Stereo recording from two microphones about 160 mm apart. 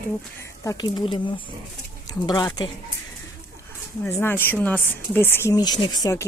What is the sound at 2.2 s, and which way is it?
Speech, 25° left (ahead or behind).